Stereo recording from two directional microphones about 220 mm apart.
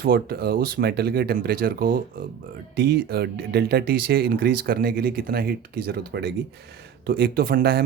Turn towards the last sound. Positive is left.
turn(degrees=-45)  # may be behind; listen again after turning